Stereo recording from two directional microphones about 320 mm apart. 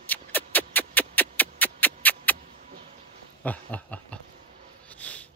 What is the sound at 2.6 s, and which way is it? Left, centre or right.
Vehicle, right.